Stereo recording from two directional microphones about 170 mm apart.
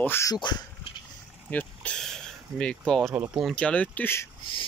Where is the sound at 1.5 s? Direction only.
10° left (ahead or behind).